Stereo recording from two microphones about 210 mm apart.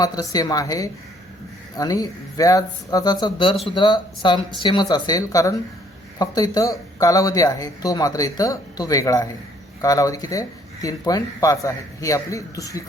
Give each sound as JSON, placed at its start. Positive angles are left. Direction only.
{"t": 0.0, "sound": "a woman's voice", "side_deg": 20}